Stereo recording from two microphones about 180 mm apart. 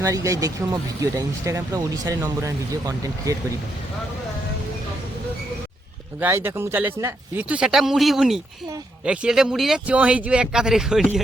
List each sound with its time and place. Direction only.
0.0 s speech: 20° right (ahead or behind)
6.1 s speech: 10° right (ahead or behind)